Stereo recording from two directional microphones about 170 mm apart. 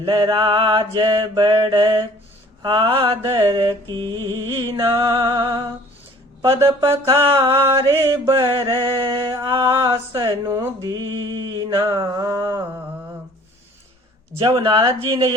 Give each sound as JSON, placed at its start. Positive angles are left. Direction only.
{"t": 0.0, "sound": "mantra", "side_deg": -25}
{"t": 4.0, "sound": "music", "side_deg": 15}
{"t": 4.8, "sound": "mantra", "side_deg": -15}
{"t": 5.3, "sound": "mantra", "side_deg": -30}
{"t": 6.4, "sound": "mantra", "side_deg": -15}
{"t": 9.2, "sound": "mantra", "side_deg": -15}
{"t": 14.3, "sound": "mantra", "side_deg": -30}